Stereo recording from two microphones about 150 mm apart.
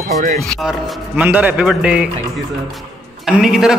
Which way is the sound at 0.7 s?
10° right (ahead or behind).